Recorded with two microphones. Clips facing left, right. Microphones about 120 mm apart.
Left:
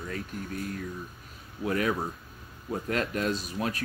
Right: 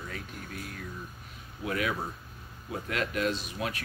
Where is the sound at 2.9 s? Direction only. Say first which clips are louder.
Left 1 dB; 35° left (ahead or behind).